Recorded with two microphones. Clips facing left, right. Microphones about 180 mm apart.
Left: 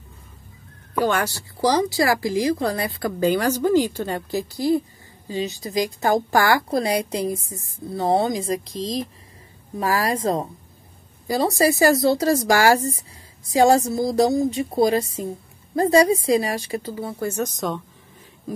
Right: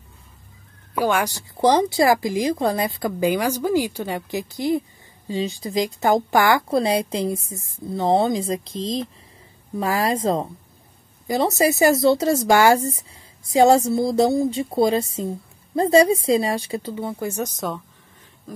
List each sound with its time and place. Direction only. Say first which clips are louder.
0.9 s a woman's voice: even; 10° right (ahead or behind)